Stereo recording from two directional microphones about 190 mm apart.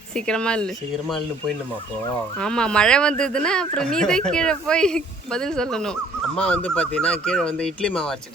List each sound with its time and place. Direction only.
0.3 s speech: 5° left (ahead or behind)
2.4 s speech: 5° left (ahead or behind)